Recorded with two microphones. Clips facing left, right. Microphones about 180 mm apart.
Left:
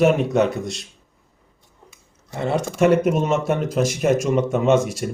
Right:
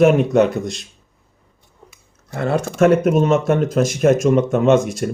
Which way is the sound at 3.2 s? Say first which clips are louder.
Right 5 dB; 10° left (ahead or behind).